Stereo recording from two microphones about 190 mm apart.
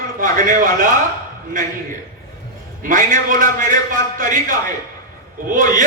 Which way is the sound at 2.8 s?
45° right (ahead or behind).